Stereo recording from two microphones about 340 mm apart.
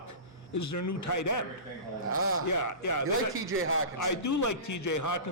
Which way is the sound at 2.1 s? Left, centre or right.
Right.